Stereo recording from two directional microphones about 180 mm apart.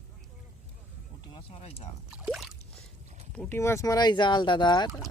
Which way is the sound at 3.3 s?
10° left (ahead or behind).